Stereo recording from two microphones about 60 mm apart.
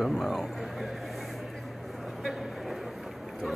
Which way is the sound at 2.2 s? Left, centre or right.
Centre.